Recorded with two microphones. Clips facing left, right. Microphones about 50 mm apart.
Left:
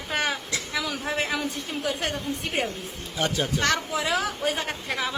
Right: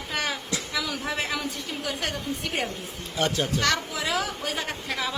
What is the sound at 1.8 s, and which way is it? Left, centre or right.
Speech, left.